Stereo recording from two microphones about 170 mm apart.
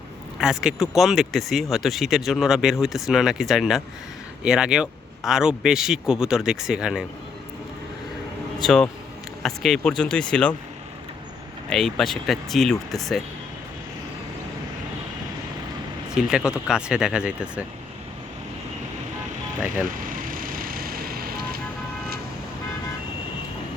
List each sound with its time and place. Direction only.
0.3 s speech: 5° right (ahead or behind)
8.6 s speech: 5° left (ahead or behind)
11.7 s speech: centre (ahead or behind)
16.1 s speech: 5° right (ahead or behind)
19.8 s vehicle: 55° right (ahead or behind)